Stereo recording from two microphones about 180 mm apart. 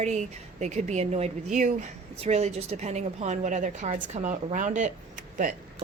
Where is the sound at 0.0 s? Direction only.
40° right (ahead or behind).